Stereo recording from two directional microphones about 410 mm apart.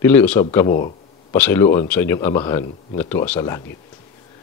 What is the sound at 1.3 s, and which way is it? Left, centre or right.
Speech, centre.